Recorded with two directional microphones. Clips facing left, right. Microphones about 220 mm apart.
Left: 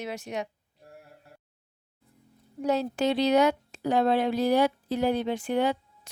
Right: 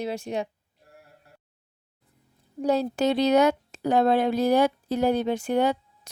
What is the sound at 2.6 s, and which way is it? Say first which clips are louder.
A woman's voice: right 3 dB; 35° right (ahead or behind).